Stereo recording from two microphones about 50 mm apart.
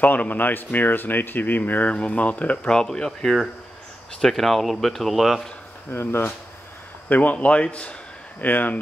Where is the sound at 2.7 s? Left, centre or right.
Centre.